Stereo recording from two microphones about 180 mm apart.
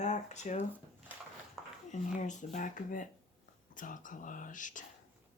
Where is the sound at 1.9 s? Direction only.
40° left (ahead or behind).